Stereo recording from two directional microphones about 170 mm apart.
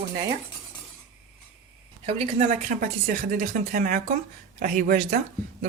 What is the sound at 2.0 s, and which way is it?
Speech, 40° right (ahead or behind).